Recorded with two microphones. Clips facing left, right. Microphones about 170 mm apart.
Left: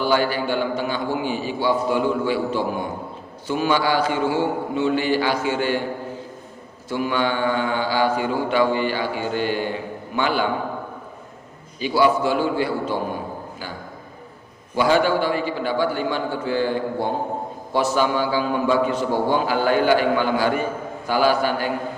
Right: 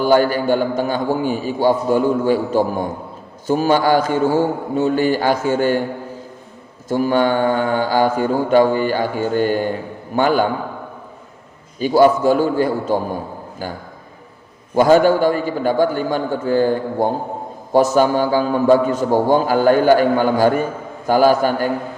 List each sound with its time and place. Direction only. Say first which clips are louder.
0.0 s a man's voice: right 6 dB; 45° right (ahead or behind)
6.8 s a man's voice: right 6 dB; 45° right (ahead or behind)
11.8 s a man's voice: right 6 dB; 45° right (ahead or behind)
14.8 s a man's voice: right 6 dB; 45° right (ahead or behind)